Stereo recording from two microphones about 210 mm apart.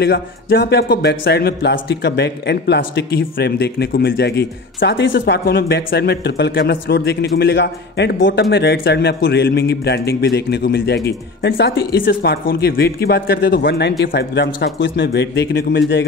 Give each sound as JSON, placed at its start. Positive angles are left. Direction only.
{"t": 0.0, "sound": "speech", "side_deg": 50}